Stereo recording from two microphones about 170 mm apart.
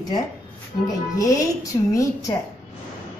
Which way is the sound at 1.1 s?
20° left (ahead or behind).